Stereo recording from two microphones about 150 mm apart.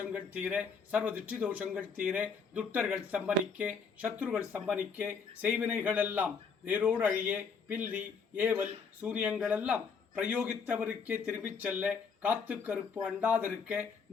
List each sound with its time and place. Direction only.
0.0 s speech: 10° right (ahead or behind)